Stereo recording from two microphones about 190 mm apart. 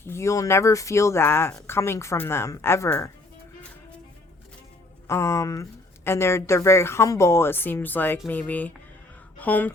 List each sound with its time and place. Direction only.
0.0 s speech: 15° left (ahead or behind)
5.0 s speech: 15° left (ahead or behind)